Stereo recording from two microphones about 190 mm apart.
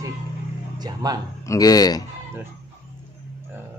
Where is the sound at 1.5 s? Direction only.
20° left (ahead or behind).